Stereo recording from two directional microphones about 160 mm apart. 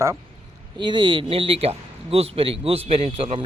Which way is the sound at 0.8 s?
30° right (ahead or behind).